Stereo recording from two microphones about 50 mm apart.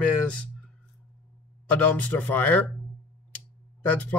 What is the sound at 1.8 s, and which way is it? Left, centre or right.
Speech, left.